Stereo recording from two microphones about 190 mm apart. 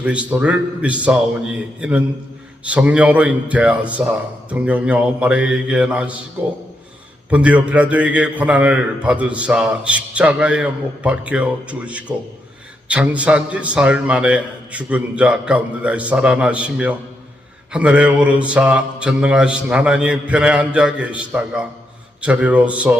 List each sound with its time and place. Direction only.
0.0 s a man's voice: 5° right (ahead or behind)
7.3 s a man's voice: 5° right (ahead or behind)
17.7 s a sound: 5° right (ahead or behind)
22.2 s a man's voice: 5° right (ahead or behind)